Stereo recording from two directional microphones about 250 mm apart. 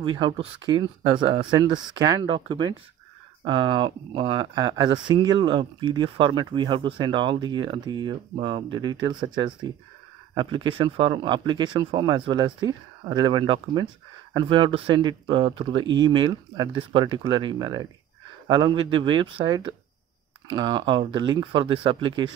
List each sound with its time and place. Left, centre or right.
0.2 s speech: centre
10.3 s speech: centre
18.9 s speech: right